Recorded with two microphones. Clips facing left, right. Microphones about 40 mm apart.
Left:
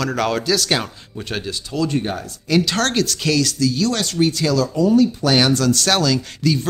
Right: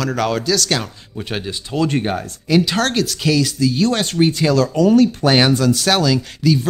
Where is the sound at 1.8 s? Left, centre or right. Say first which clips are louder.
Right 3 dB; right.